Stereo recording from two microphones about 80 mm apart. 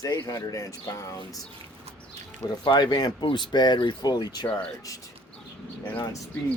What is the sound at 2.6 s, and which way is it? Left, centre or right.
Speech, left.